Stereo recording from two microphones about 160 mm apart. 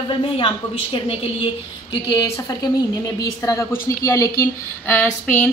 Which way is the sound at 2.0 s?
25° left (ahead or behind).